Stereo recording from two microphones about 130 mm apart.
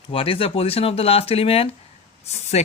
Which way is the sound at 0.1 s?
45° left (ahead or behind).